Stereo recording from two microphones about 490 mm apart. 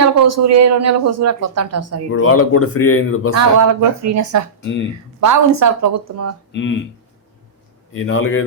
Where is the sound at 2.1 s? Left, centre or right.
Left.